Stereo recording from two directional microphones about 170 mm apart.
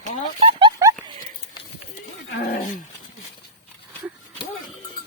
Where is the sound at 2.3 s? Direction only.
70° left (ahead or behind).